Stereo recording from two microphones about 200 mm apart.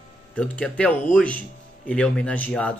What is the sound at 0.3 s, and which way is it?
Speech, 5° left (ahead or behind).